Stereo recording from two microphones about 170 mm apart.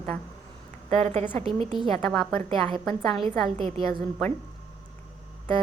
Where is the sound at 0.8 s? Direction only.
40° right (ahead or behind).